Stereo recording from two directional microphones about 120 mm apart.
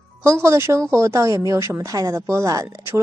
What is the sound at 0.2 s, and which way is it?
Speech, 25° right (ahead or behind).